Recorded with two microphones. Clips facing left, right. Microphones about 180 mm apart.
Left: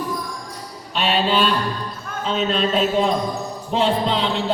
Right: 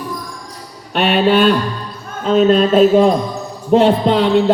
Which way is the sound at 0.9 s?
60° right (ahead or behind).